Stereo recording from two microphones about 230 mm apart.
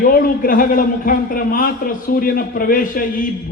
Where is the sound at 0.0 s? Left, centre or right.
Left.